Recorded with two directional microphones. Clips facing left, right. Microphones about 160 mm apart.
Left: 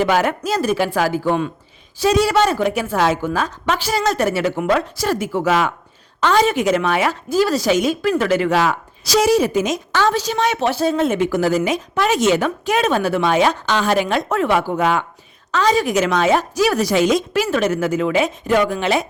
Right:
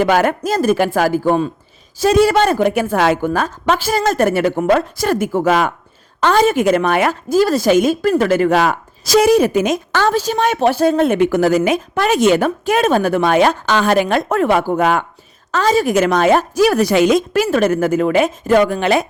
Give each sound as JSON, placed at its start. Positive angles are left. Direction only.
{"t": 0.0, "sound": "speech", "side_deg": -50}